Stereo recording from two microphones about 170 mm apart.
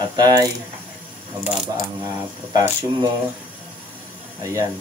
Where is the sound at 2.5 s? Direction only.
20° right (ahead or behind).